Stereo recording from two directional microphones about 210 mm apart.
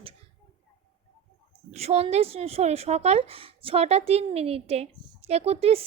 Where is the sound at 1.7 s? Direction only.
30° right (ahead or behind).